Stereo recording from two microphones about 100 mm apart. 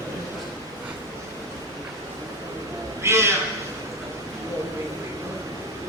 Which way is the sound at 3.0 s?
25° right (ahead or behind).